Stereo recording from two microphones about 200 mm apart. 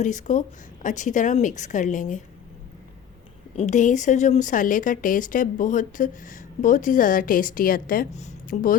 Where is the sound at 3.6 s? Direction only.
35° left (ahead or behind).